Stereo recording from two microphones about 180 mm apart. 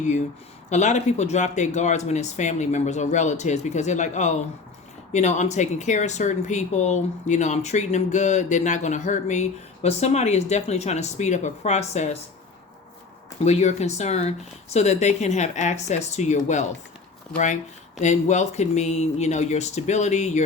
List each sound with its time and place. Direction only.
0.7 s speech: 40° left (ahead or behind)
13.4 s speech: 40° left (ahead or behind)